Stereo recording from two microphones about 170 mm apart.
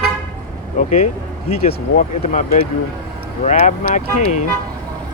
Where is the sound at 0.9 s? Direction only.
45° left (ahead or behind).